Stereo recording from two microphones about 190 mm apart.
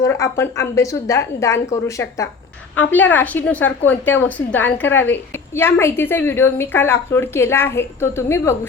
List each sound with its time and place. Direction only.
0.0 s a woman's voice: 15° left (ahead or behind)